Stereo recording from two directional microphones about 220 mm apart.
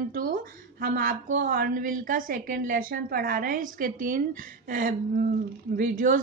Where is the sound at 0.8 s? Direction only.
40° right (ahead or behind).